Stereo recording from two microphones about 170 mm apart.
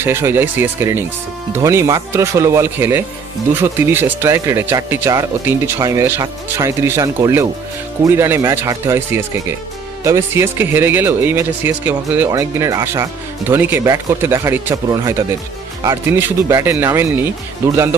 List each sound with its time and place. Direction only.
0.0 s speech: 15° right (ahead or behind)